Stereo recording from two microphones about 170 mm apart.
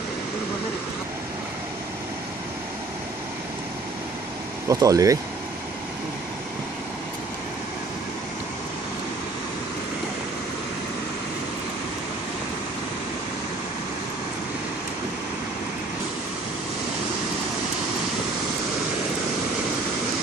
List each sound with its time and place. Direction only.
4.6 s speech: 20° right (ahead or behind)